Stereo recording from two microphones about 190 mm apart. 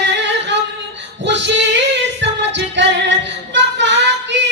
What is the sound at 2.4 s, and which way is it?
Music, 70° right (ahead or behind).